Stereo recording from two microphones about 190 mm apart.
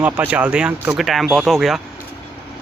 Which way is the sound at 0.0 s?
10° right (ahead or behind).